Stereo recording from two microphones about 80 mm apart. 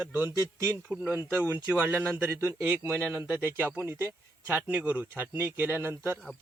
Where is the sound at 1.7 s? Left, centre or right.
Right.